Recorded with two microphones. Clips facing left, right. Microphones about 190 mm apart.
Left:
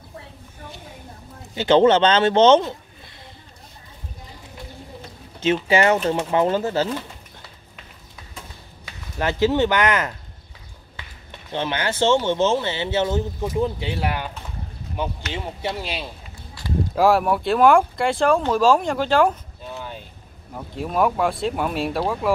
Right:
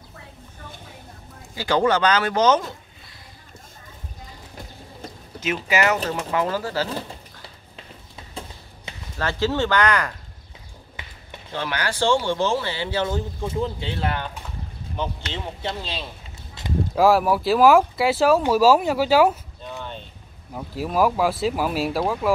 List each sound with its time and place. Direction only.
1.5 s speech: 25° left (ahead or behind)
5.4 s speech: 30° left (ahead or behind)
8.9 s a sound: 25° right (ahead or behind)
9.2 s speech: 20° left (ahead or behind)
11.5 s speech: 20° left (ahead or behind)
16.6 s a sound: 20° right (ahead or behind)
16.9 s speech: centre (ahead or behind)
19.7 s vehicle: 5° left (ahead or behind)
20.5 s speech: centre (ahead or behind)